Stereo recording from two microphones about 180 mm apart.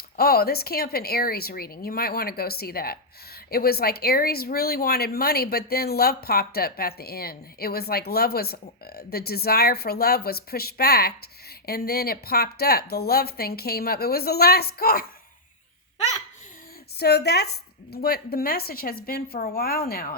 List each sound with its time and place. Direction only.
0.2 s speech: 60° left (ahead or behind)
17.0 s speech: 65° left (ahead or behind)